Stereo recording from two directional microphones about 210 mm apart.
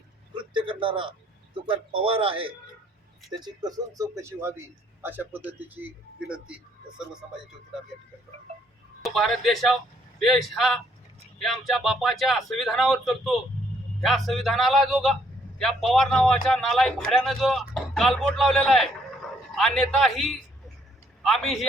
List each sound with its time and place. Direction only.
0.3 s a sound: 25° right (ahead or behind)
1.5 s speech: 25° right (ahead or behind); by 5.9 s 10° right (ahead or behind)
9.0 s a man's voice: centre (ahead or behind)